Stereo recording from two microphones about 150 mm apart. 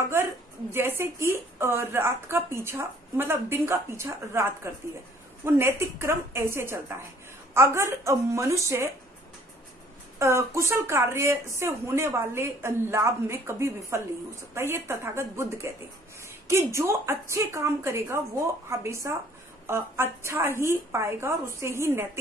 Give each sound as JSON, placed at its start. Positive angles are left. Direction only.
{"t": 0.1, "sound": "a woman's voice", "side_deg": -15}
{"t": 10.1, "sound": "a woman's voice", "side_deg": -20}